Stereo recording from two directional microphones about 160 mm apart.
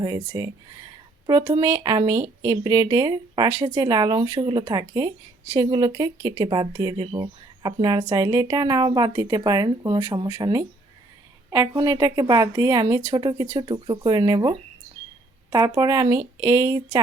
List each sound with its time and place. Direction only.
0.0 s speech: 25° right (ahead or behind)